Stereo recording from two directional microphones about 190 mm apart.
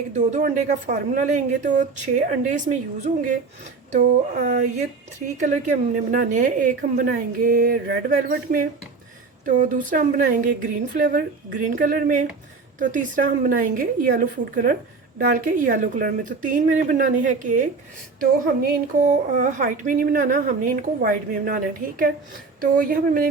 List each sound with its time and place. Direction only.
0.1 s a woman's voice: 40° right (ahead or behind)